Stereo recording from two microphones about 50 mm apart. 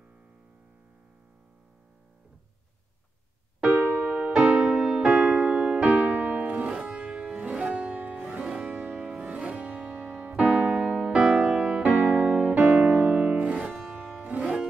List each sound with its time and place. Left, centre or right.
3.7 s music: right
8.5 s music: centre
8.7 s music: right
9.2 s piano: right
11.5 s music: right
12.0 s music: right